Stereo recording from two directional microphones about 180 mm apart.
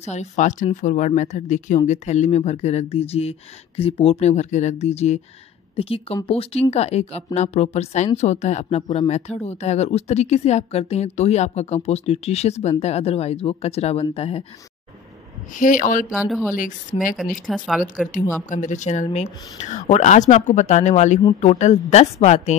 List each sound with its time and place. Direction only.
0.0 s speech: 40° left (ahead or behind)
15.5 s speech: 45° left (ahead or behind)
16.1 s speech: 5° right (ahead or behind)
16.5 s speech: 50° left (ahead or behind)
17.5 s speech: centre (ahead or behind)
18.5 s speech: 45° left (ahead or behind)